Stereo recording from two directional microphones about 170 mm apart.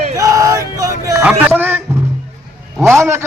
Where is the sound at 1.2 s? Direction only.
10° right (ahead or behind).